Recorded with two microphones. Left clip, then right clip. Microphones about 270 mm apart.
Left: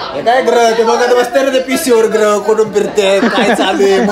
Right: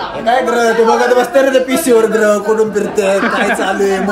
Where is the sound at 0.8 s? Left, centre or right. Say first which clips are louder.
Left 1 dB; centre.